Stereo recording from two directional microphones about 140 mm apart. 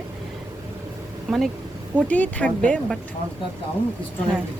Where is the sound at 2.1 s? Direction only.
10° left (ahead or behind).